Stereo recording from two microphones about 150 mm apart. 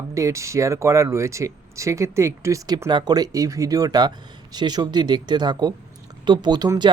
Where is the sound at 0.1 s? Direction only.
20° right (ahead or behind).